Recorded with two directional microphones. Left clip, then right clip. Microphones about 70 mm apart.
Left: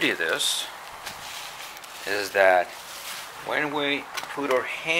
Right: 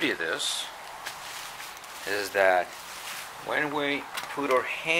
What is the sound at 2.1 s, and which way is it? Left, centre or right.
Speech, centre.